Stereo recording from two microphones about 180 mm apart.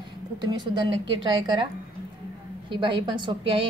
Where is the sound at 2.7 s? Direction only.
25° right (ahead or behind).